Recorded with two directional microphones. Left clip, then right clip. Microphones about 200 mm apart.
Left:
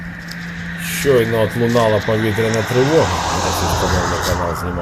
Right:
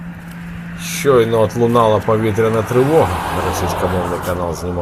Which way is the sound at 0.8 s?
Centre (ahead or behind).